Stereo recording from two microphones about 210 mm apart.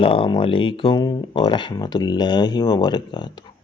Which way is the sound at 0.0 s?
25° left (ahead or behind).